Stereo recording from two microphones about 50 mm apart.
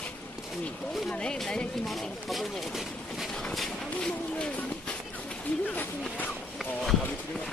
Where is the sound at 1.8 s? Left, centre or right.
Centre.